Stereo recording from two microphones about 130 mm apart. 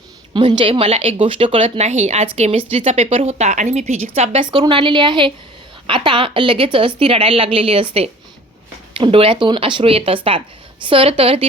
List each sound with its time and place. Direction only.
0.3 s speech: 40° right (ahead or behind); by 4.4 s 55° right (ahead or behind)
4.4 s a woman's voice: 35° right (ahead or behind)